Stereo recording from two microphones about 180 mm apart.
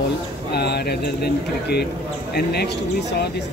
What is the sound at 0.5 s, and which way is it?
Speech, 65° left (ahead or behind).